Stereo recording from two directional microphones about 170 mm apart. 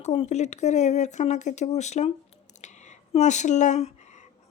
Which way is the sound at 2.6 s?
45° left (ahead or behind).